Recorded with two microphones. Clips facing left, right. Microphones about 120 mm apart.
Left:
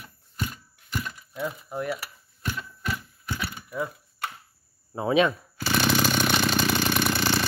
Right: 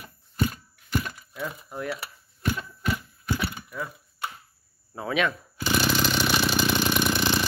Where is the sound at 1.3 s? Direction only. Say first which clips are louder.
Left 4 dB; 10° left (ahead or behind).